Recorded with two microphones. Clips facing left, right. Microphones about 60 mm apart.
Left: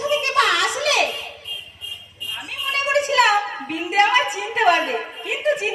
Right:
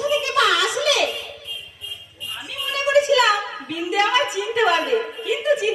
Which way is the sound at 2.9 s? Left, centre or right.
Left.